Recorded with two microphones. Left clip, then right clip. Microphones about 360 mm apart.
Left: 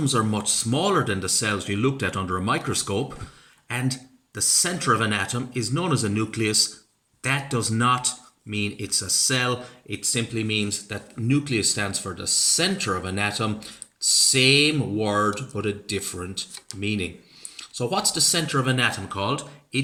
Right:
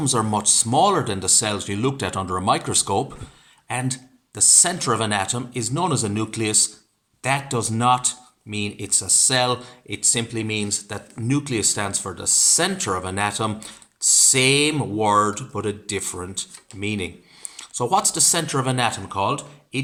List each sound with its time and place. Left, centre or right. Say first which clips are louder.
0.0 s speech: right 3 dB; centre